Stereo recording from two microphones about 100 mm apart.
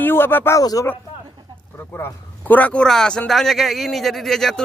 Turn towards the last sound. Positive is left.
turn(degrees=5)  # may be behind; listen again after turning